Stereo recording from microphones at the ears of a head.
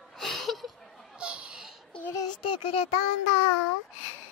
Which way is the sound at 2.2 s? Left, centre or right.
Left.